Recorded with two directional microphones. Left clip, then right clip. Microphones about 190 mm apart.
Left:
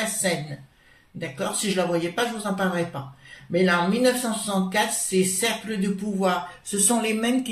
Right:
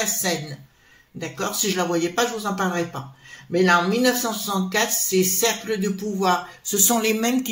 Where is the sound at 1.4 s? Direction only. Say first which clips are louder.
Right 2 dB; 35° right (ahead or behind).